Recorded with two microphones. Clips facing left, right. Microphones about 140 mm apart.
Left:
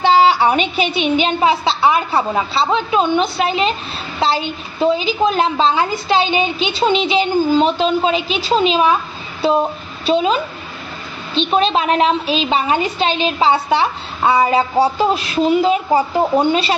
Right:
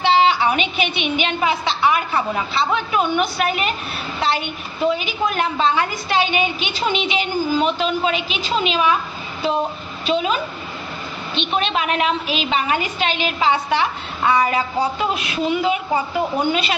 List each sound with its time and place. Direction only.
0.0 s a woman's voice: 40° left (ahead or behind)
10.0 s a woman's voice: 30° left (ahead or behind)
11.5 s a woman's voice: 30° left (ahead or behind)